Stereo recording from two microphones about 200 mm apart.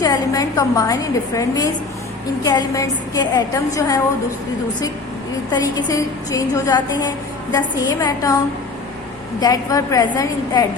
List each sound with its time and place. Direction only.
0.0 s a woman's voice: 15° left (ahead or behind)
5.5 s a woman's voice: 20° left (ahead or behind)
9.4 s a woman's voice: 20° left (ahead or behind)